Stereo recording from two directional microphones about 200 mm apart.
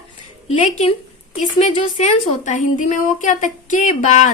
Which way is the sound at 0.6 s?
35° left (ahead or behind).